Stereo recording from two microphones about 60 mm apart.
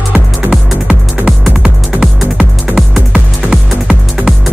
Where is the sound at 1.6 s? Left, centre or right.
Centre.